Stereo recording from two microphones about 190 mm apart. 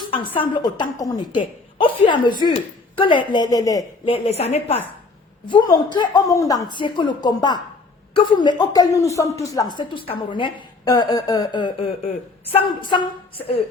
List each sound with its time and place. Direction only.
0.3 s speech: 25° left (ahead or behind)
4.1 s a woman's voice: 30° left (ahead or behind)